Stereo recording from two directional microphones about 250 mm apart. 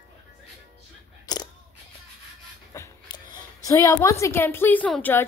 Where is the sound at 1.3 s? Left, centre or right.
Centre.